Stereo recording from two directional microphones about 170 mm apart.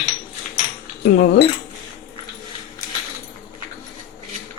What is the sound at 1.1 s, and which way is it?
Speech, 65° left (ahead or behind).